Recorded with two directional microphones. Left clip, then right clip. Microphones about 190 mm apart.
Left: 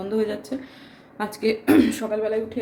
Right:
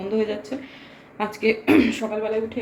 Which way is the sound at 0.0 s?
20° left (ahead or behind).